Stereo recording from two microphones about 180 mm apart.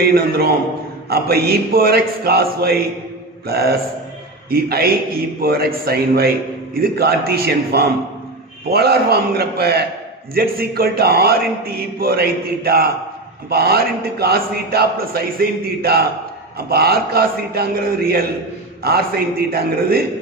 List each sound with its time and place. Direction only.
0.0 s a man's voice: 60° right (ahead or behind)